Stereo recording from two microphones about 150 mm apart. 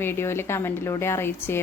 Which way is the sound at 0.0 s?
15° left (ahead or behind).